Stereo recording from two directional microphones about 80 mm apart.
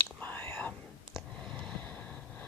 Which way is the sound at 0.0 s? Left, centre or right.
Left.